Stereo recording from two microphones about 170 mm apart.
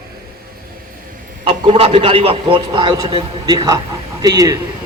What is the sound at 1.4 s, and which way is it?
A man's voice, 35° right (ahead or behind).